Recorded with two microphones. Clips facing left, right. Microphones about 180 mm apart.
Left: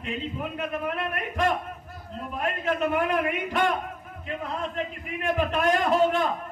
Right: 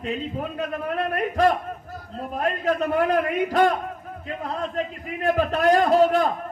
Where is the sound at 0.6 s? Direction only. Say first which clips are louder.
Right 3 dB; 35° right (ahead or behind).